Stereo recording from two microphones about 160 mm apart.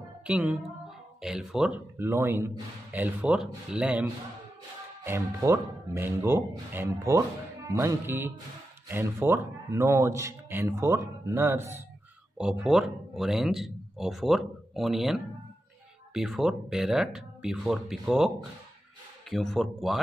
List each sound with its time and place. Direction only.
0.3 s speech: 5° right (ahead or behind)
2.0 s speech: 15° right (ahead or behind)
12.4 s speech: 5° right (ahead or behind)
19.3 s speech: centre (ahead or behind)